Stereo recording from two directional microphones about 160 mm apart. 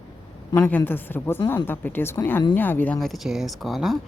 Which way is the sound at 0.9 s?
10° left (ahead or behind).